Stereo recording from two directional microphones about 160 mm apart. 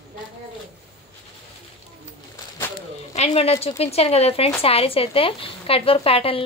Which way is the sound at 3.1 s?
40° left (ahead or behind).